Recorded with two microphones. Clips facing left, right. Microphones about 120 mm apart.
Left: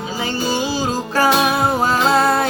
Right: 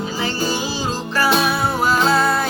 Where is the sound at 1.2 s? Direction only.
45° left (ahead or behind).